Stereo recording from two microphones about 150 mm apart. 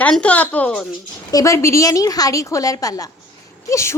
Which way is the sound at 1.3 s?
20° left (ahead or behind).